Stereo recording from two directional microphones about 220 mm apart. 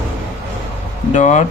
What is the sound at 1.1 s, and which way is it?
Speech, 35° left (ahead or behind).